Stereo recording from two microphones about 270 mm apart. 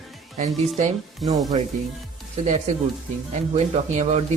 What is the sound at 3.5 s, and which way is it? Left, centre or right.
Speech, right.